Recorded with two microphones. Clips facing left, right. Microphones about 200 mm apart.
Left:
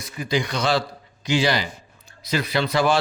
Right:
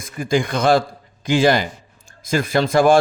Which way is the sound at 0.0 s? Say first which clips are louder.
Right 5 dB; 50° right (ahead or behind).